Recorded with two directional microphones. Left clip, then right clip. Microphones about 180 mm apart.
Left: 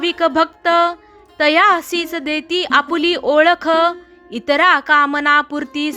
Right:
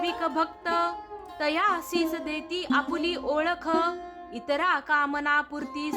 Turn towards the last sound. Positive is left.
turn(degrees=30)  # may be behind; listen again after turning